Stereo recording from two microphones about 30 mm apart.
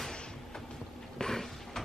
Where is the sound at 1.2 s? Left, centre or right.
Centre.